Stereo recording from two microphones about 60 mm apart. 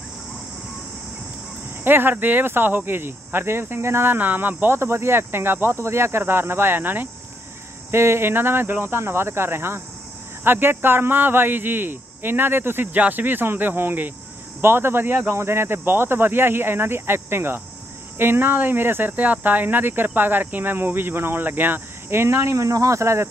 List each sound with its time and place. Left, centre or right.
1.9 s speech: right
4.7 s speech: right
7.9 s speech: right